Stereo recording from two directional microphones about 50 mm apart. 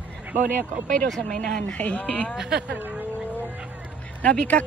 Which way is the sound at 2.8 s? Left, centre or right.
Right.